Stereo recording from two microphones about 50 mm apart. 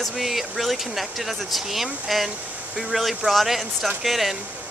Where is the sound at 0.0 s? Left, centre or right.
Centre.